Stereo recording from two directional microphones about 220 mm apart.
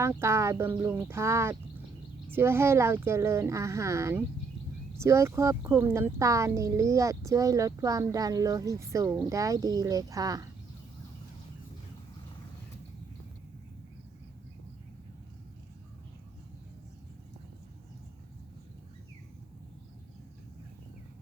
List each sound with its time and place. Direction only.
0.0 s speech: 10° right (ahead or behind)